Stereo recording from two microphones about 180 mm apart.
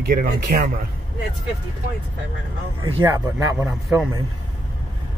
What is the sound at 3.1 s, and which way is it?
Speech, 15° right (ahead or behind).